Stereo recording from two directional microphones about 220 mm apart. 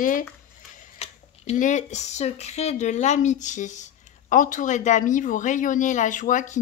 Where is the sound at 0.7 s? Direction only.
30° left (ahead or behind).